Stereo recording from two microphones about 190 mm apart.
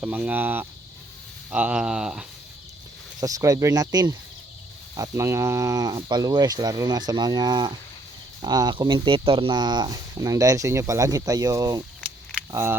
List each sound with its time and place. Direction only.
0.0 s speech: 10° right (ahead or behind)
3.2 s speech: 20° right (ahead or behind)